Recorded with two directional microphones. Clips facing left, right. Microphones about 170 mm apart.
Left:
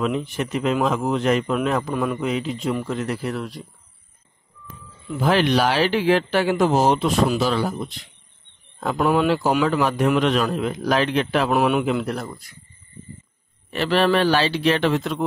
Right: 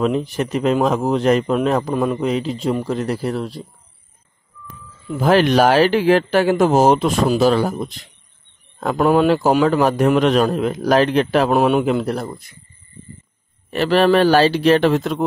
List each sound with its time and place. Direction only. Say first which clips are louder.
0.0 s a man's voice: right 4 dB; 35° right (ahead or behind)
5.2 s speech: right 5 dB; 45° right (ahead or behind)
8.7 s a man's voice: right 4 dB; 50° right (ahead or behind)
13.7 s speech: right 5 dB; 45° right (ahead or behind)